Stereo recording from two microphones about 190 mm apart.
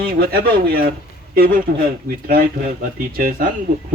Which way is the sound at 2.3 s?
50° right (ahead or behind).